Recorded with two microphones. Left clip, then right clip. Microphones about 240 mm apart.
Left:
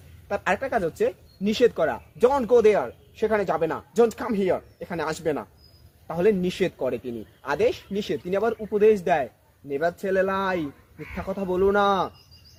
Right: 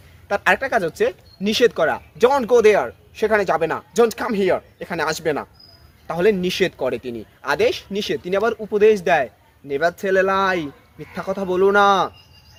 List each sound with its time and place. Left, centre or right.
0.3 s speech: right